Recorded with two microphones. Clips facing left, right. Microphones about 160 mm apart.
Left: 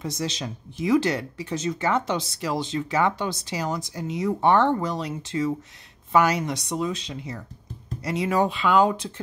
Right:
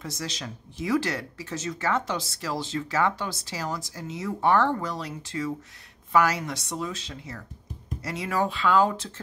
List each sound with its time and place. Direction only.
0.0 s speech: 20° left (ahead or behind)